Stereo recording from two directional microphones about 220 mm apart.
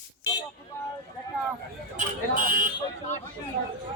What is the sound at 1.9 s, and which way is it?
Speech, 35° right (ahead or behind).